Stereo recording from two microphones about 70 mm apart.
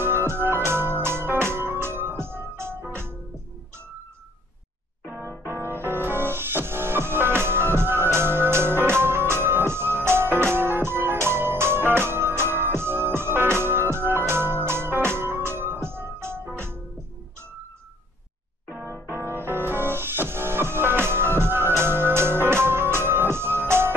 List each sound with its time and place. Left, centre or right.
0.3 s music: right
0.7 s organ: right
2.9 s music: right
5.2 s music: left
5.7 s music: right
18.9 s music: left
19.3 s music: right